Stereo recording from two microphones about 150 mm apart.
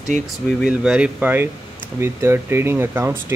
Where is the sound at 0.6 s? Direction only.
5° right (ahead or behind).